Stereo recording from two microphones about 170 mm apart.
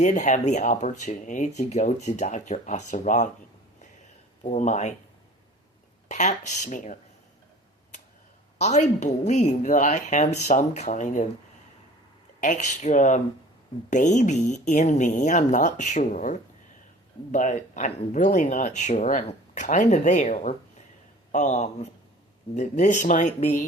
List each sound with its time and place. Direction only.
0.0 s speech: 45° left (ahead or behind)
4.4 s speech: 45° left (ahead or behind)
6.1 s speech: 45° left (ahead or behind)
8.5 s speech: 40° left (ahead or behind)
12.4 s speech: 45° left (ahead or behind)